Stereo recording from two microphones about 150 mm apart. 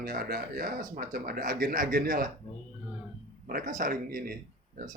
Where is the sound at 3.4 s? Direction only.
65° right (ahead or behind).